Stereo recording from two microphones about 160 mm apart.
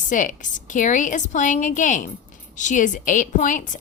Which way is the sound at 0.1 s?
55° left (ahead or behind).